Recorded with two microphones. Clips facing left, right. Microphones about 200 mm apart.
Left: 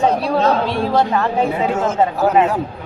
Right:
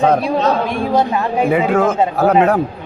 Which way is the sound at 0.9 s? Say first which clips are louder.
Right 1 dB; 15° right (ahead or behind).